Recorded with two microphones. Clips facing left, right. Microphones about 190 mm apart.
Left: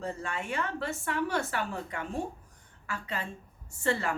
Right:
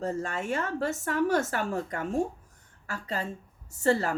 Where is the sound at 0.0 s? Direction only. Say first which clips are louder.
Right 5 dB; 40° right (ahead or behind).